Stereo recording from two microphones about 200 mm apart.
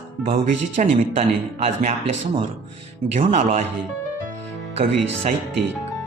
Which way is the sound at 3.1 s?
35° right (ahead or behind).